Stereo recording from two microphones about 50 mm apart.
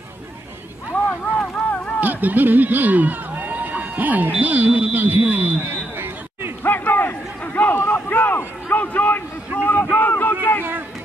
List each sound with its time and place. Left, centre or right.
0.9 s vehicle: left
2.0 s run: right
4.4 s speech: right
6.6 s a sound: left